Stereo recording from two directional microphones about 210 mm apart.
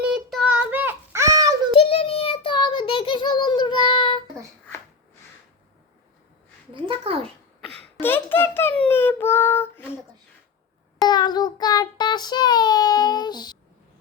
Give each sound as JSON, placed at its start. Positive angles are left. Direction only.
{"t": 0.0, "sound": "child singing", "side_deg": 0}
{"t": 1.8, "sound": "child singing", "side_deg": 25}
{"t": 7.0, "sound": "a sound", "side_deg": -25}
{"t": 8.0, "sound": "child singing", "side_deg": 10}
{"t": 11.1, "sound": "child singing", "side_deg": 20}